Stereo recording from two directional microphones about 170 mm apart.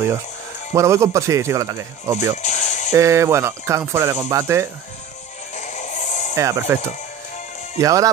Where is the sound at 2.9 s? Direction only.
15° right (ahead or behind).